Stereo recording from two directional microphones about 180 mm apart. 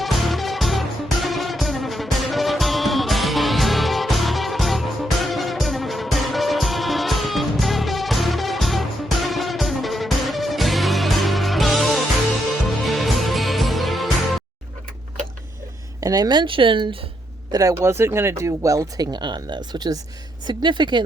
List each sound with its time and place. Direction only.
0.0 s music: centre (ahead or behind)
16.0 s speech: 20° right (ahead or behind)